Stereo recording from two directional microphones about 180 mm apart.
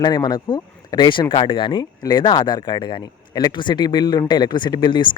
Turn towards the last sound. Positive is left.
turn(degrees=25)  # may be behind; listen again after turning